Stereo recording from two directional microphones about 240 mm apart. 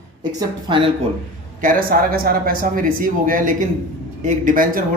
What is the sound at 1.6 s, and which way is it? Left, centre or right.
Speech, right.